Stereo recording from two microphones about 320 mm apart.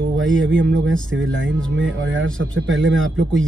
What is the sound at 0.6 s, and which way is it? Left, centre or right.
Speech, right.